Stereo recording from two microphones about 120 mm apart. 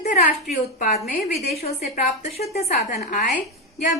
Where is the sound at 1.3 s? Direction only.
60° left (ahead or behind).